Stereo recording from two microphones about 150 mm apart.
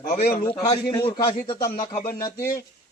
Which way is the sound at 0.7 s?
30° left (ahead or behind).